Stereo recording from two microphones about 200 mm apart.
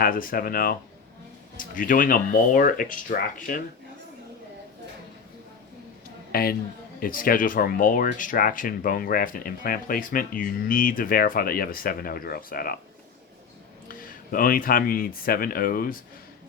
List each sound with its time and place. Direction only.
0.0 s speech: 45° left (ahead or behind)
6.3 s speech: 50° left (ahead or behind)
13.8 s speech: 45° left (ahead or behind)